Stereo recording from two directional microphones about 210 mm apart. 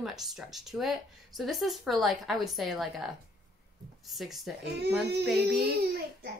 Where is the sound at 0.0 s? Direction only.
Centre (ahead or behind).